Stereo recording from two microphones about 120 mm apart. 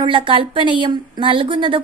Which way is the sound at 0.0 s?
45° right (ahead or behind).